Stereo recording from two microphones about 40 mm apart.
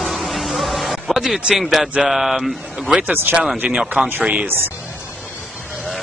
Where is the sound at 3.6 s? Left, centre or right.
Right.